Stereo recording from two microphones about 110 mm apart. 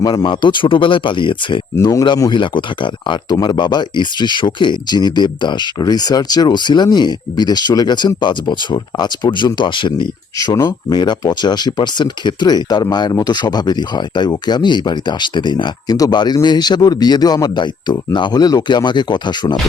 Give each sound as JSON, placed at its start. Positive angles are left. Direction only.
{"t": 0.0, "sound": "speech", "side_deg": 45}
{"t": 1.8, "sound": "speech", "side_deg": 30}
{"t": 2.3, "sound": "speech", "side_deg": 50}
{"t": 10.3, "sound": "speech", "side_deg": 35}